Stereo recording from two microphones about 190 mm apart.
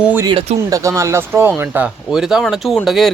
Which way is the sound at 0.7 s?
15° right (ahead or behind).